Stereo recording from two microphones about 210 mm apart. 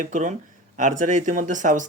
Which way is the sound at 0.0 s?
35° right (ahead or behind).